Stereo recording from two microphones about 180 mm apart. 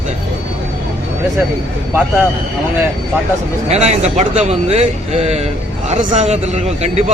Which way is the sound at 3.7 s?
40° right (ahead or behind).